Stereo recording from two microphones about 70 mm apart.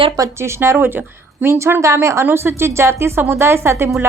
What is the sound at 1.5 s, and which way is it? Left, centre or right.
A woman's voice, right.